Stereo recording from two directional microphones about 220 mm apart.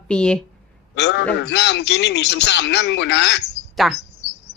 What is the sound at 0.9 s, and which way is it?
A man's voice, 50° left (ahead or behind).